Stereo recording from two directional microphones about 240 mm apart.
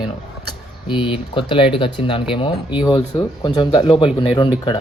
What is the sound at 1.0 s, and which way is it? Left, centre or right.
Speech, left.